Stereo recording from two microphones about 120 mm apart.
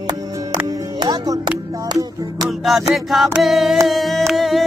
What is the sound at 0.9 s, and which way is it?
Speech, 35° right (ahead or behind).